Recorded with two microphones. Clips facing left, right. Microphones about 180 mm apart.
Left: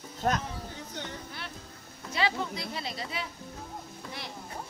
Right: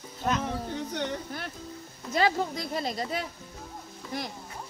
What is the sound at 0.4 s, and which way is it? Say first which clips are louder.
Speech: right 8 dB; 65° right (ahead or behind).